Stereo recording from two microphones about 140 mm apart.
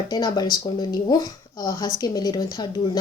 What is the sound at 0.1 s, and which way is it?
Speech, 30° left (ahead or behind).